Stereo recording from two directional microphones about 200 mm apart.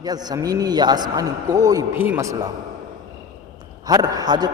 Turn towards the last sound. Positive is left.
turn(degrees=-20)  # may be behind; listen again after turning